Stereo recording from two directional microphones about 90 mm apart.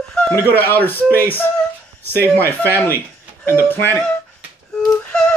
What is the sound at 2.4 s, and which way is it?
Speech, 25° left (ahead or behind).